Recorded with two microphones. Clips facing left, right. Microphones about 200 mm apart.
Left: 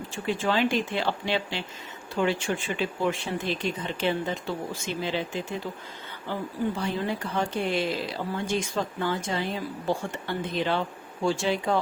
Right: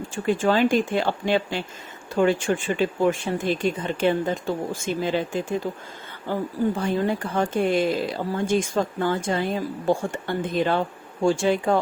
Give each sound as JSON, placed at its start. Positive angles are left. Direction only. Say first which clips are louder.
{"t": 0.1, "sound": "speech", "louder": "right 6 dB", "side_deg": -45}